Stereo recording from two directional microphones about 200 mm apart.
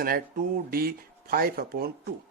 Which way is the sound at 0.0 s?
45° right (ahead or behind).